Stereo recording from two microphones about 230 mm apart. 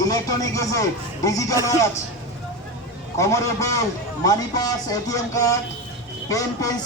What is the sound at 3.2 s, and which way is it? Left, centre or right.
A man's voice, centre.